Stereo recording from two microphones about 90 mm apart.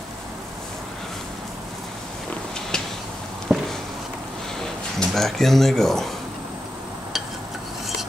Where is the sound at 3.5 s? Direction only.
15° right (ahead or behind).